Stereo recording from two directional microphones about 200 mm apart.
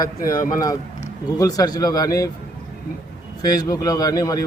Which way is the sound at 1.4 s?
20° left (ahead or behind).